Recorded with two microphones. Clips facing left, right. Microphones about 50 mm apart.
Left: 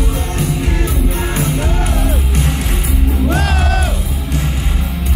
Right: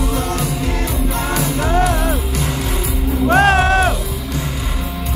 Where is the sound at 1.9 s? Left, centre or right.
Right.